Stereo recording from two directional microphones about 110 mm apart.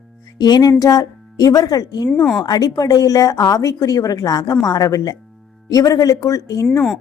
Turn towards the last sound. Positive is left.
turn(degrees=30)  # may be behind; listen again after turning